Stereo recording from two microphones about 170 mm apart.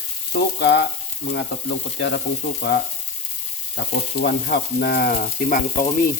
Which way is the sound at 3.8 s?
65° left (ahead or behind).